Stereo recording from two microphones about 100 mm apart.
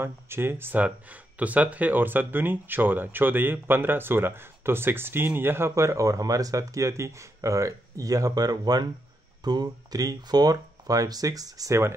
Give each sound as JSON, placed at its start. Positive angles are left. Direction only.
{"t": 0.0, "sound": "speech", "side_deg": -25}